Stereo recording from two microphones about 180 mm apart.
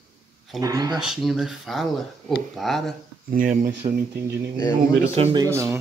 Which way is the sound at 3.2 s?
50° right (ahead or behind).